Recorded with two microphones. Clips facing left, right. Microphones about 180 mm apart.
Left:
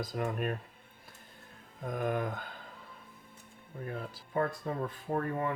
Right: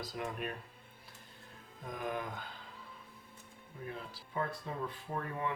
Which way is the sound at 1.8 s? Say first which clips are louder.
Left 6 dB; 50° left (ahead or behind).